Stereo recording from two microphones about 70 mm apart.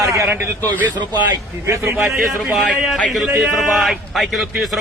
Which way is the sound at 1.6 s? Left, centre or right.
Right.